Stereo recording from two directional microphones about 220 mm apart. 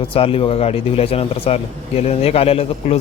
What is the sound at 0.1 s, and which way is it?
Speech, 25° left (ahead or behind).